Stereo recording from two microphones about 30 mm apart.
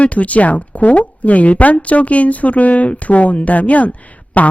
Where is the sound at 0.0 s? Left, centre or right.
Left.